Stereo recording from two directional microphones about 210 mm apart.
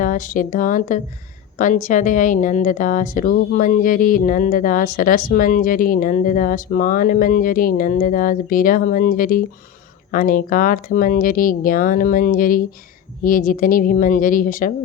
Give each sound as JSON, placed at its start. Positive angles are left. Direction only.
{"t": 0.0, "sound": "a woman's voice", "side_deg": 40}